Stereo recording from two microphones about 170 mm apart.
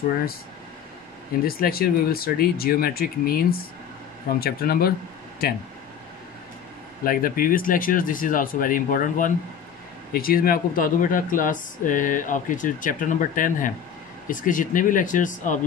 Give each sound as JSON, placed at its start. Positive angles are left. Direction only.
{"t": 1.4, "sound": "speech", "side_deg": 60}
{"t": 7.1, "sound": "speech", "side_deg": 55}